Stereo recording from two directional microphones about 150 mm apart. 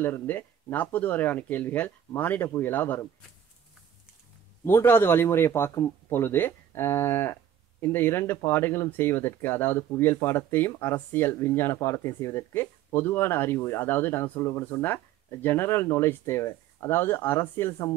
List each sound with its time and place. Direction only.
0.0 s speech: 15° left (ahead or behind)
4.6 s speech: 15° left (ahead or behind)